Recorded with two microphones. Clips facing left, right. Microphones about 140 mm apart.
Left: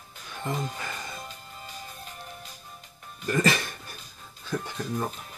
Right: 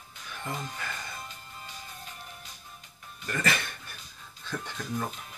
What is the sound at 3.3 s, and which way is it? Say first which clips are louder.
Speech: left 6 dB; 25° left (ahead or behind).